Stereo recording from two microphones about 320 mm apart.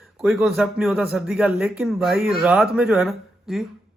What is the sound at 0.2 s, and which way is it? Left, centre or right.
A man's voice, centre.